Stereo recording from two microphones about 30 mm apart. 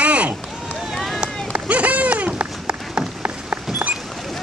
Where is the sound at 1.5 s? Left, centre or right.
Right.